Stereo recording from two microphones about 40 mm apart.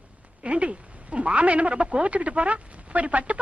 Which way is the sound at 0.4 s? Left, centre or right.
Right.